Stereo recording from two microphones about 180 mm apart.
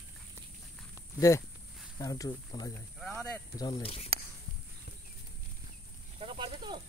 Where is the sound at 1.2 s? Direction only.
15° left (ahead or behind).